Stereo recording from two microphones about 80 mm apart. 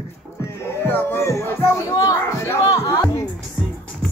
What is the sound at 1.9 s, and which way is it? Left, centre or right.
Music, left.